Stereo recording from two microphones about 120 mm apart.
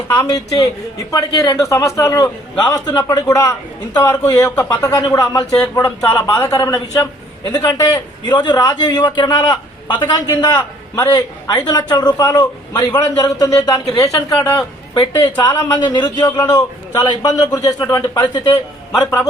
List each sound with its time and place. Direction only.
0.2 s a man's voice: 30° left (ahead or behind)
8.2 s a man's voice: 35° left (ahead or behind)